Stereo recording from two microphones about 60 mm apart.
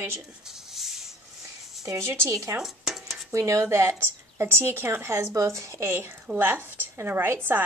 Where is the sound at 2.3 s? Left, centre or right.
Right.